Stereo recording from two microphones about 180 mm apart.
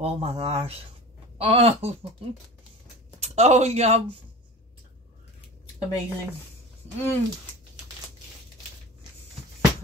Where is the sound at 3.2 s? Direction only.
40° right (ahead or behind).